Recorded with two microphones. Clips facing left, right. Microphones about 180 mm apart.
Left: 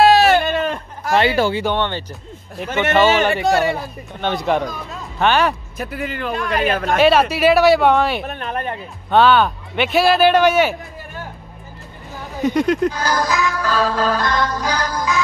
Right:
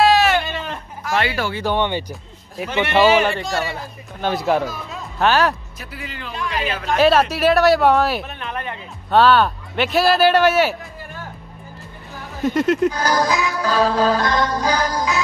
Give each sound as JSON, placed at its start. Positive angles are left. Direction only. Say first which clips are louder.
{"t": 0.1, "sound": "a sound", "louder": "left 3 dB", "side_deg": 35}
{"t": 0.5, "sound": "a sound", "louder": "left 8 dB", "side_deg": 55}
{"t": 1.1, "sound": "speech", "louder": "left 6 dB", "side_deg": 25}
{"t": 1.6, "sound": "music", "louder": "even", "side_deg": -10}
{"t": 2.8, "sound": "a man's voice", "louder": "even", "side_deg": -10}
{"t": 5.8, "sound": "speech", "louder": "left 9 dB", "side_deg": 50}
{"t": 7.0, "sound": "a man's voice", "louder": "even", "side_deg": 0}
{"t": 8.2, "sound": "speech", "louder": "left 4 dB", "side_deg": 45}
{"t": 9.1, "sound": "a man's voice", "louder": "left 1 dB", "side_deg": 0}
{"t": 12.4, "sound": "a man's voice", "louder": "left 1 dB", "side_deg": 0}
{"t": 13.0, "sound": "music", "louder": "even", "side_deg": -15}